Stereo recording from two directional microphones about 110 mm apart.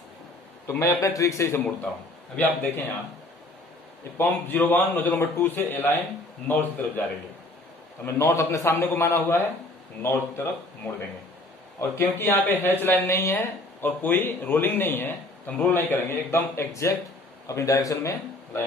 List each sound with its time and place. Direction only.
0.7 s speech: 25° left (ahead or behind)
2.3 s a man's voice: 15° left (ahead or behind)
4.2 s a man's voice: 15° left (ahead or behind)
8.0 s speech: 25° left (ahead or behind)